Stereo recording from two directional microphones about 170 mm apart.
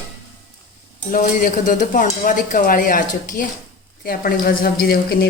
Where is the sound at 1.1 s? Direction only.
50° left (ahead or behind).